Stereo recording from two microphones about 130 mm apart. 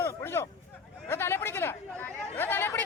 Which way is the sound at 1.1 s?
20° left (ahead or behind).